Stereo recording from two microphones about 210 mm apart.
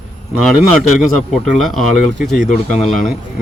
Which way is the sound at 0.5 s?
5° right (ahead or behind).